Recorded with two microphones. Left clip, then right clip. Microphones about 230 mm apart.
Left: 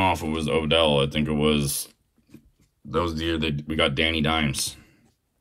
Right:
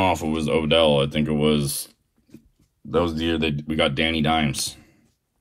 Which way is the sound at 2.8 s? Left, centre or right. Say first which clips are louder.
Right 3 dB; centre.